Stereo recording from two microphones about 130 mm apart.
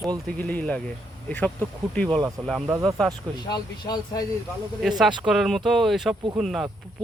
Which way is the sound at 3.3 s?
35° left (ahead or behind).